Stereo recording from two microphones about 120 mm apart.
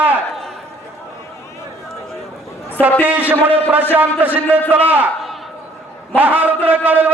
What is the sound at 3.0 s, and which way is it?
A man's voice, 15° right (ahead or behind).